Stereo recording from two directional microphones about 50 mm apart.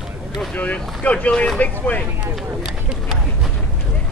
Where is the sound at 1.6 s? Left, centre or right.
Left.